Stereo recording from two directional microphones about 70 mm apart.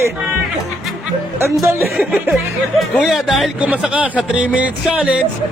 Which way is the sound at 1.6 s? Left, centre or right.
Right.